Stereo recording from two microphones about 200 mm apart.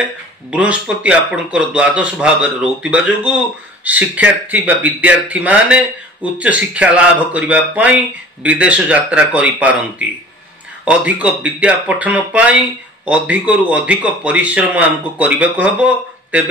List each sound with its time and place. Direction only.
0.5 s a man's voice: 5° right (ahead or behind)